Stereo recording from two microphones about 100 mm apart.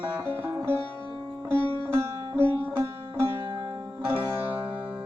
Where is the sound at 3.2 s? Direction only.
60° right (ahead or behind).